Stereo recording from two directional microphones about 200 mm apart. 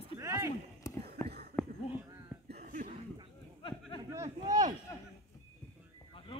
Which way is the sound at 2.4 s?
50° right (ahead or behind).